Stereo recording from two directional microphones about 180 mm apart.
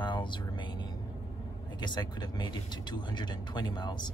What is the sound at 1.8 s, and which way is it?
Speech, 25° left (ahead or behind).